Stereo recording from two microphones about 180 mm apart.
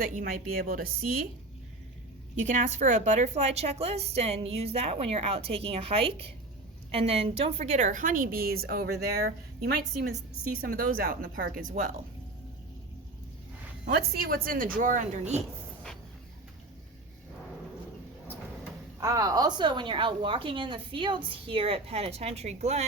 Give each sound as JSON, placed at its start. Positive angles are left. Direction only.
{"t": 0.0, "sound": "a woman's voice", "side_deg": -50}
{"t": 2.5, "sound": "a woman's voice", "side_deg": -45}
{"t": 13.8, "sound": "a woman's voice", "side_deg": -55}
{"t": 18.9, "sound": "a woman's voice", "side_deg": -15}